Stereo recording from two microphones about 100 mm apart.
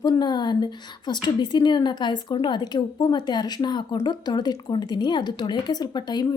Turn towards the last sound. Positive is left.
turn(degrees=45)  # may be behind; listen again after turning